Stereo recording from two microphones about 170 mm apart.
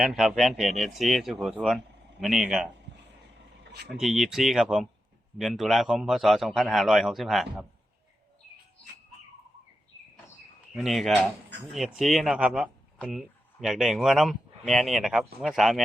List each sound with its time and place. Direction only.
0.0 s speech: centre (ahead or behind)
3.6 s a sound: 75° right (ahead or behind)
4.0 s speech: centre (ahead or behind)
10.8 s speech: centre (ahead or behind)